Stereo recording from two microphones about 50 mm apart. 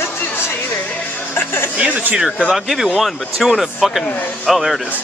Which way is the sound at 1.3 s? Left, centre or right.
Left.